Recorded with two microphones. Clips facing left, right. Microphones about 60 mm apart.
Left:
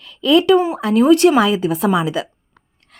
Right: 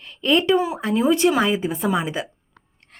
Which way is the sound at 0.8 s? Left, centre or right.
Left.